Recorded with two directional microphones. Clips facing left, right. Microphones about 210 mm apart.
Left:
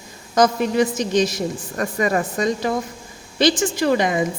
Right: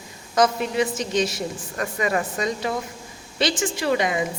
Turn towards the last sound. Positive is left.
turn(degrees=40)  # may be behind; listen again after turning